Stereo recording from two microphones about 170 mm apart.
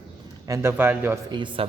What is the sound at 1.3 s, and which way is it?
Speech, 30° right (ahead or behind).